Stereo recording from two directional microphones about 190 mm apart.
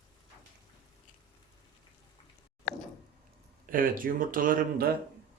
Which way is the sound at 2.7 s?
55° left (ahead or behind).